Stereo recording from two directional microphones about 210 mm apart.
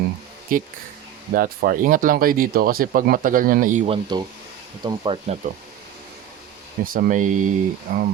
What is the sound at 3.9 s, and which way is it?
Speech, 20° right (ahead or behind).